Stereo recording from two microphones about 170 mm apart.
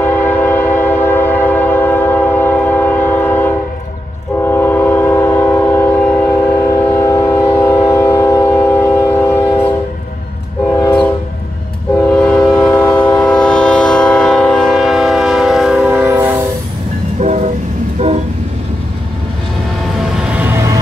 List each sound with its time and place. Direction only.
0.0 s train: 10° left (ahead or behind)
10.8 s train: 10° left (ahead or behind); by 16.4 s 15° right (ahead or behind)
17.2 s train: 45° right (ahead or behind)
20.2 s a sound: 10° right (ahead or behind)